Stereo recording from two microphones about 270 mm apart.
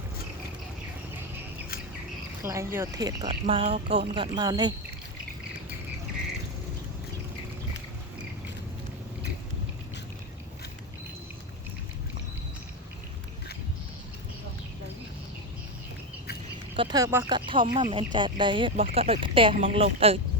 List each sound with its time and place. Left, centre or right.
2.4 s speech: centre
16.7 s speech: centre